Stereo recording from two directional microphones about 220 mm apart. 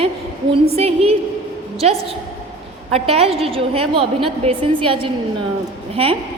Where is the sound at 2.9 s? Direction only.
25° right (ahead or behind).